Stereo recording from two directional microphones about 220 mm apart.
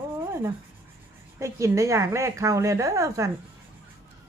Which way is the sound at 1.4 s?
15° right (ahead or behind).